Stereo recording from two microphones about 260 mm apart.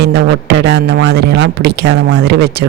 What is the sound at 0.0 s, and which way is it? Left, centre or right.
Speech, right.